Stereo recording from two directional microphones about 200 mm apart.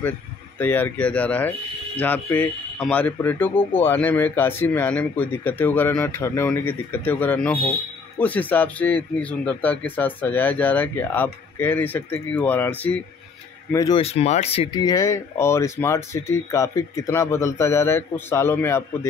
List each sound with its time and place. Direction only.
0.6 s speech: 10° left (ahead or behind)
14.0 s speech: 30° left (ahead or behind); by 18.9 s 10° left (ahead or behind)